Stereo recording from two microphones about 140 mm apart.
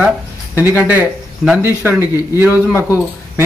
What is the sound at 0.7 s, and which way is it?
Speech, 15° right (ahead or behind).